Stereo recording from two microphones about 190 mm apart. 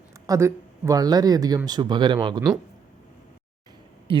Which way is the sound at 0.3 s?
15° right (ahead or behind).